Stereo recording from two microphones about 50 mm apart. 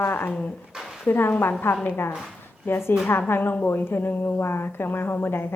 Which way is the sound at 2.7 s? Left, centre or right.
Left.